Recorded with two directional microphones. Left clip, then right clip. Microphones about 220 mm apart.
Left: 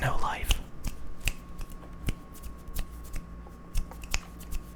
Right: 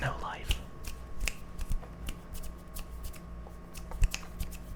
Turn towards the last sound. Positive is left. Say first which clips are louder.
# left 5 dB
turn(degrees=50)  # may be behind; listen again after turning